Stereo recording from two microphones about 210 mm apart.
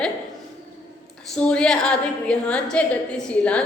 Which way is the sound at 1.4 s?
5° left (ahead or behind).